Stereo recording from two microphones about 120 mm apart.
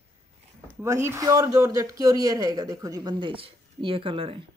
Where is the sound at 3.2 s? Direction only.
45° right (ahead or behind).